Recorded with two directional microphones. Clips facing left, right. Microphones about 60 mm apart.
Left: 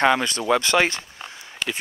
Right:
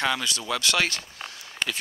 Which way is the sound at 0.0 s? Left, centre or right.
Left.